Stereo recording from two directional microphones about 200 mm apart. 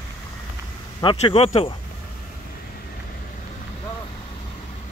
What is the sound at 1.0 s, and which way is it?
Speech, 25° left (ahead or behind).